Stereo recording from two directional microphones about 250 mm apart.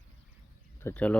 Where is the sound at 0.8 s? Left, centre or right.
Centre.